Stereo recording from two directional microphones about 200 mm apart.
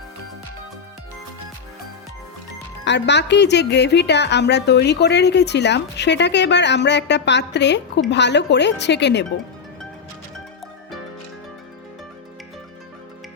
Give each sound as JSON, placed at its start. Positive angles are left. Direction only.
{"t": 2.8, "sound": "a woman's voice", "side_deg": 60}